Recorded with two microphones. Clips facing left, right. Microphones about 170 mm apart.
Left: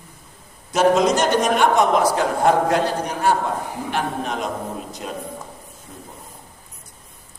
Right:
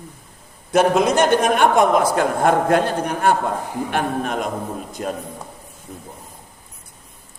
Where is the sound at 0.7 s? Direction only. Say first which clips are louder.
Right 1 dB; 55° right (ahead or behind).